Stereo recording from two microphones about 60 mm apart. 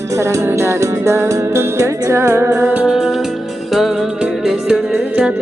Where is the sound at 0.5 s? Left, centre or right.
Right.